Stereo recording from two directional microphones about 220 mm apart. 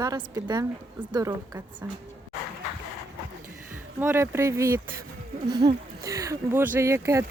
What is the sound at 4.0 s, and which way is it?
Speech, 10° right (ahead or behind).